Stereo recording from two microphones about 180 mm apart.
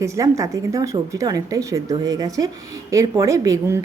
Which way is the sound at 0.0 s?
15° right (ahead or behind).